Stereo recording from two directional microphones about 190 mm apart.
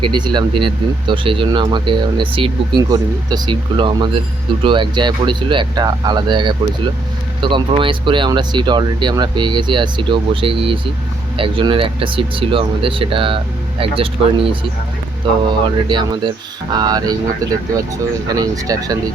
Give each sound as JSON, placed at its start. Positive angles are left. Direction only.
{"t": 0.0, "sound": "speech", "side_deg": -25}